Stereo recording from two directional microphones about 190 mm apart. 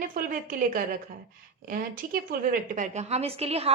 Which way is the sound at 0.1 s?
50° right (ahead or behind).